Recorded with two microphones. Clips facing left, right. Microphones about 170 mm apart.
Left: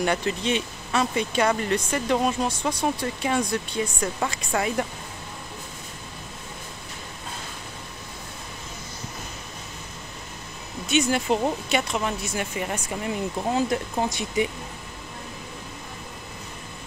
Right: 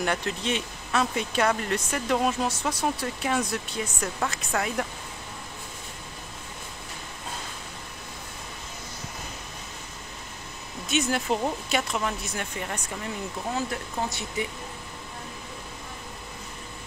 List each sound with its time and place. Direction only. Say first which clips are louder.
0.0 s speech: left 4 dB; centre (ahead or behind)
10.9 s speech: left 4 dB; centre (ahead or behind); by 14.5 s 15° left (ahead or behind)